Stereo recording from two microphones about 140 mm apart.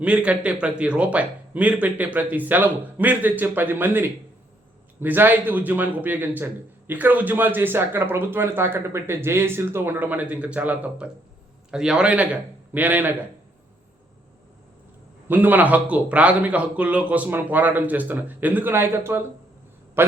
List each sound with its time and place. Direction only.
0.0 s speech: 10° right (ahead or behind)
15.3 s speech: 15° right (ahead or behind)